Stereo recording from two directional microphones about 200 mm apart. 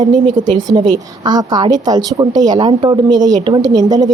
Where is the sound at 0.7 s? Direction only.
20° right (ahead or behind).